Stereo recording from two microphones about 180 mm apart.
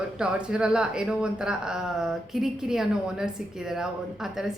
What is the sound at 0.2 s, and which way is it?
Speech, 5° right (ahead or behind).